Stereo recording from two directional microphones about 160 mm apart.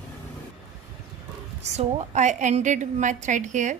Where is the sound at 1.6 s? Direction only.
45° right (ahead or behind).